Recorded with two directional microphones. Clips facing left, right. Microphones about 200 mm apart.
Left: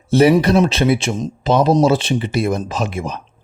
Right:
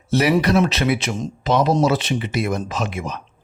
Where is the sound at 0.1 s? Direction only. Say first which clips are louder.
Left 5 dB; 30° left (ahead or behind).